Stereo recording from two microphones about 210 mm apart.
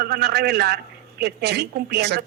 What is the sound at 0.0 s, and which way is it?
A woman's voice, 50° right (ahead or behind).